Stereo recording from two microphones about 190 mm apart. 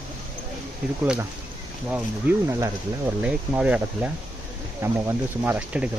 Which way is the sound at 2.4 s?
15° right (ahead or behind).